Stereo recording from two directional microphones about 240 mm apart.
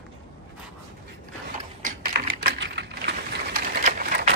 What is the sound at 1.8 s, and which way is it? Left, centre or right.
Typing, right.